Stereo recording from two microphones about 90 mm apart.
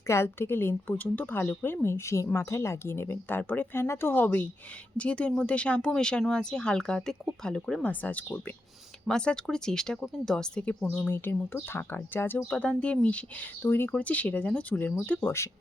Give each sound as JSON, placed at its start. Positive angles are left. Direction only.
{"t": 0.1, "sound": "a woman's voice", "side_deg": 30}
{"t": 11.1, "sound": "a woman's voice", "side_deg": 25}